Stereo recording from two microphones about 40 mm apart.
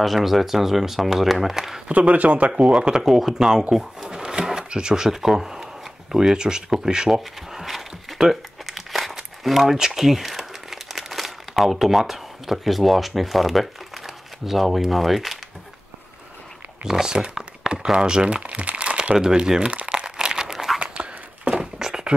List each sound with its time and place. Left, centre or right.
0.0 s speech: centre
1.9 s speech: right
2.5 s speech: right
3.7 s cash register: centre
4.2 s drawer open or close: right
4.5 s speech: centre
7.1 s crumpling: centre
16.8 s speech: centre
18.4 s crumpling: right
19.1 s speech: centre
19.7 s crumpling: right
20.5 s tearing: centre
20.8 s a sound: right
21.5 s a sound: centre